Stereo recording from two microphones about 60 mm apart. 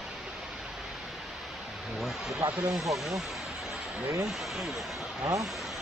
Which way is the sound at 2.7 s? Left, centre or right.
Centre.